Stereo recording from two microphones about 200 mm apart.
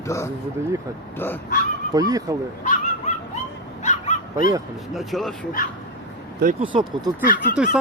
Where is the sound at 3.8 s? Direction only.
35° left (ahead or behind).